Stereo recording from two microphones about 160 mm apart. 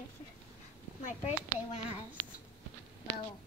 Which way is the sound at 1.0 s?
40° left (ahead or behind).